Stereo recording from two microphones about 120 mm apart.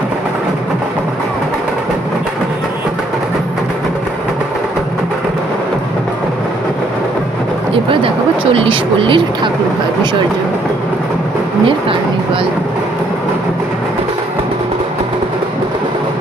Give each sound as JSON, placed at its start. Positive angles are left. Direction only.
{"t": 8.5, "sound": "speech", "side_deg": -50}
{"t": 11.6, "sound": "speech", "side_deg": -50}